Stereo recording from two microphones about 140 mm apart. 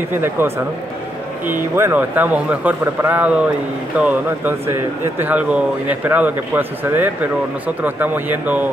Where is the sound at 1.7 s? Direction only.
15° right (ahead or behind).